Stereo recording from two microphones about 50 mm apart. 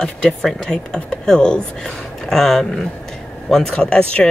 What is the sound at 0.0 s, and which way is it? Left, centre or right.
Speech, centre.